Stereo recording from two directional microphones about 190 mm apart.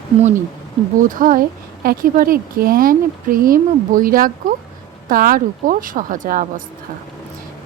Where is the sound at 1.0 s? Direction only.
45° right (ahead or behind).